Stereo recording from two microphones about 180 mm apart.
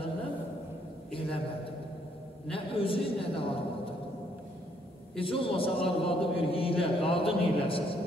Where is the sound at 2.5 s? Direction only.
30° left (ahead or behind).